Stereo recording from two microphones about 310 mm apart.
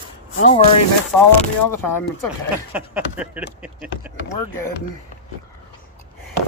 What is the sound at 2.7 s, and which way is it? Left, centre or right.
Speech, centre.